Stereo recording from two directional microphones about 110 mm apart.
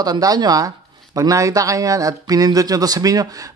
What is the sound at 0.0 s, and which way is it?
Speech, 35° right (ahead or behind).